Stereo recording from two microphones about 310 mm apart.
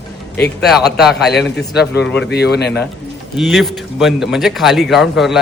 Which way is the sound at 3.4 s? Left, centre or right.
Centre.